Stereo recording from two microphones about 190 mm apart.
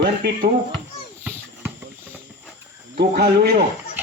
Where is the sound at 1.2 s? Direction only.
10° right (ahead or behind).